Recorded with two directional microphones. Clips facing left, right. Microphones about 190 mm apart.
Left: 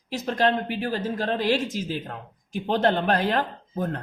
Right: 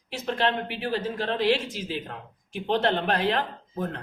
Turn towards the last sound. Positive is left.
turn(degrees=45)  # may be behind; listen again after turning